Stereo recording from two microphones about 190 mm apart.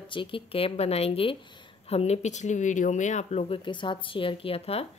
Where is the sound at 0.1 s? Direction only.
25° left (ahead or behind).